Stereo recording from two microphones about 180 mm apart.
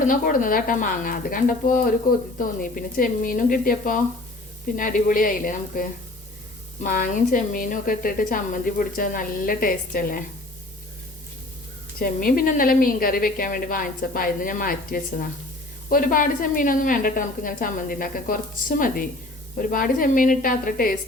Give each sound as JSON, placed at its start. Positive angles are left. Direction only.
{"t": 0.1, "sound": "a woman's voice", "side_deg": 50}
{"t": 11.9, "sound": "a woman's voice", "side_deg": 55}